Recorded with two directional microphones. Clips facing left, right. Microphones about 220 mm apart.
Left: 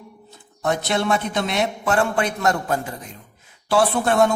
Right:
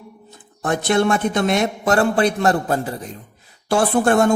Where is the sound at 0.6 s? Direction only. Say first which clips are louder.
Right 4 dB; 50° right (ahead or behind); by 3.1 s 35° right (ahead or behind).